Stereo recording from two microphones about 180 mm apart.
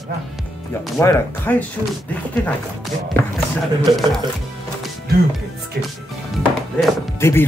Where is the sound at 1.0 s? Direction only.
10° left (ahead or behind).